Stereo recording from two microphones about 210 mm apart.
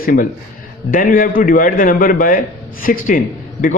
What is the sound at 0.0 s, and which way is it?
A man's voice, 45° left (ahead or behind).